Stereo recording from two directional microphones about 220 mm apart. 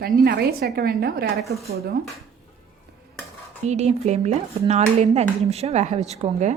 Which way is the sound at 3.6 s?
30° right (ahead or behind).